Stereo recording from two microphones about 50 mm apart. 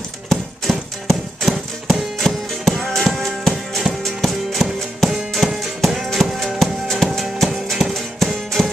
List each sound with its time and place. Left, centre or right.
0.3 s horse: centre
1.4 s music: centre